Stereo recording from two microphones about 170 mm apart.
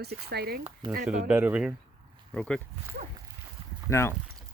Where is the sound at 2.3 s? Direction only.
5° left (ahead or behind).